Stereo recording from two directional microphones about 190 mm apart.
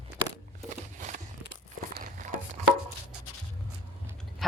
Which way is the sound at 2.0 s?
40° right (ahead or behind).